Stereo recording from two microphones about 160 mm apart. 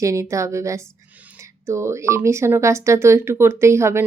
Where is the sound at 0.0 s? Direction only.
20° right (ahead or behind).